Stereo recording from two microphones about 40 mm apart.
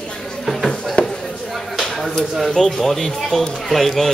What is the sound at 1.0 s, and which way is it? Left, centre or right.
Chop, left.